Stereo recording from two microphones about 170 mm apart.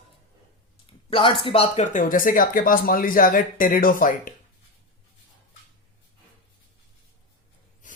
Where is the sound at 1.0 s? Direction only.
30° left (ahead or behind); by 4.3 s 55° left (ahead or behind).